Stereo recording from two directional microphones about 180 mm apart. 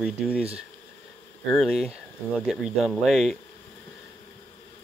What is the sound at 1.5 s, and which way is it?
Speech, centre (ahead or behind).